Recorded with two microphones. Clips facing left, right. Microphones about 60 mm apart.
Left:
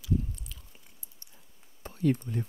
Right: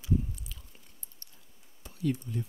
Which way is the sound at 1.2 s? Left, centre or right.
Centre.